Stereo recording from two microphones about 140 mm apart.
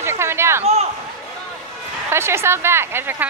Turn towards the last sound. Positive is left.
turn(degrees=-15)  # may be behind; listen again after turning